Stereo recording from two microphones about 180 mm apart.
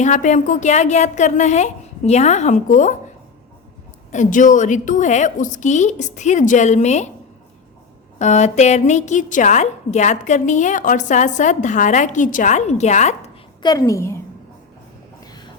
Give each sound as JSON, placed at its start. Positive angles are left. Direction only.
{"t": 0.0, "sound": "a woman's voice", "side_deg": 40}
{"t": 4.1, "sound": "a woman's voice", "side_deg": 45}
{"t": 8.2, "sound": "a woman's voice", "side_deg": 40}
{"t": 13.6, "sound": "a woman's voice", "side_deg": 20}